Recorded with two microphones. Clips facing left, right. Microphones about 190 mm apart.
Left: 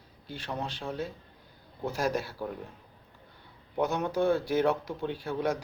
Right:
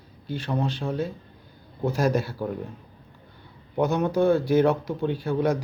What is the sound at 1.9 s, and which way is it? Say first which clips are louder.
Speech: right 6 dB; 45° right (ahead or behind).